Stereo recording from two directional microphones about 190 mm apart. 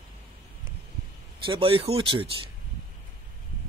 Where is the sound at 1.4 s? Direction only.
25° right (ahead or behind).